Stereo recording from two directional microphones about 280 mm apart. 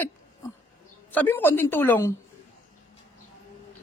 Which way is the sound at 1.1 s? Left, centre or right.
Centre.